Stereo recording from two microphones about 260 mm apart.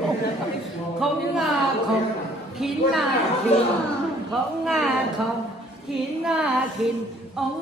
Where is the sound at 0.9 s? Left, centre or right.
Centre.